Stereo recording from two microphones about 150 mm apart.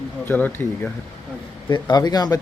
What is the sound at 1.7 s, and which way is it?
Speech, 30° left (ahead or behind).